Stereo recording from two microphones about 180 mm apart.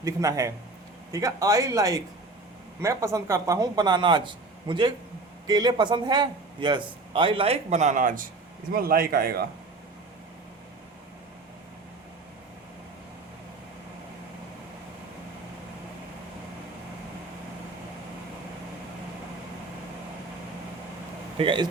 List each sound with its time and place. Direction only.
0.0 s speech: 20° right (ahead or behind); by 9.4 s 55° right (ahead or behind)
21.3 s speech: 30° right (ahead or behind)